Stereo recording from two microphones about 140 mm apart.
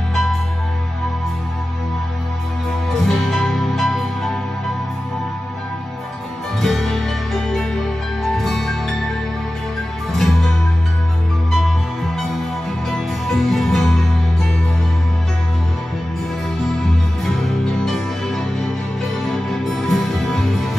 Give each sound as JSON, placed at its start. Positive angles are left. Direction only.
{"t": 0.1, "sound": "music", "side_deg": 0}
{"t": 2.9, "sound": "music", "side_deg": 0}
{"t": 6.6, "sound": "music", "side_deg": 0}
{"t": 10.1, "sound": "music", "side_deg": 0}
{"t": 11.5, "sound": "music", "side_deg": 0}
{"t": 17.8, "sound": "music", "side_deg": 0}